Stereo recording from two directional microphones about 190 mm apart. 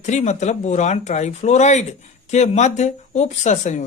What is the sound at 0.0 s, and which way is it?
Speech, 40° left (ahead or behind).